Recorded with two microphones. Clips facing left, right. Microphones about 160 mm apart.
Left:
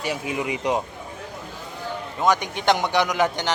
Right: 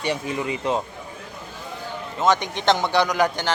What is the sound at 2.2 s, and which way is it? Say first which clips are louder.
Speech: right 1 dB; 10° left (ahead or behind).